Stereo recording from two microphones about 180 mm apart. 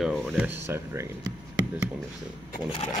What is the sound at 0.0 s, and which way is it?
Speech, centre (ahead or behind).